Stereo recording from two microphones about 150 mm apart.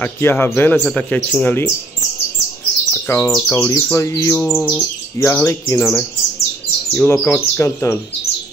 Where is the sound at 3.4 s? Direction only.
15° left (ahead or behind).